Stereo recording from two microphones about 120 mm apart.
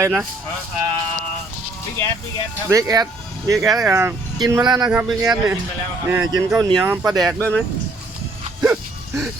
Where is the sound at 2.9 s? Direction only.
30° right (ahead or behind).